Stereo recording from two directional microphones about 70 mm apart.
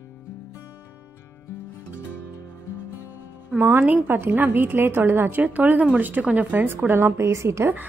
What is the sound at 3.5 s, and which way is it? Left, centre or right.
A woman's voice, right.